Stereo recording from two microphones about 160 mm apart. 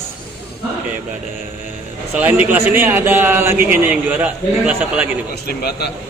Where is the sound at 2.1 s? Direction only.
10° right (ahead or behind).